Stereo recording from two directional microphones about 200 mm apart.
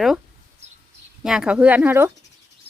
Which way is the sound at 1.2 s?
5° right (ahead or behind).